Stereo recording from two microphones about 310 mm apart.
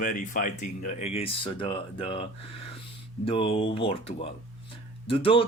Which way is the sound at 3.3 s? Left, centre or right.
Centre.